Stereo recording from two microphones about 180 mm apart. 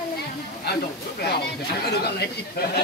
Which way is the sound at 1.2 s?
65° left (ahead or behind).